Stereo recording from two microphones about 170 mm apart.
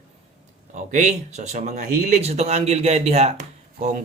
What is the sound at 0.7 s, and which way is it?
Speech, 45° right (ahead or behind).